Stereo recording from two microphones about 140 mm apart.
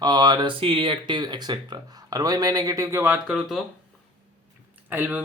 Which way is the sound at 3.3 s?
Centre (ahead or behind).